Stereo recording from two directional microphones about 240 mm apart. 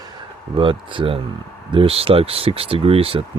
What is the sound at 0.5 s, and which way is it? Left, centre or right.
Speech, right.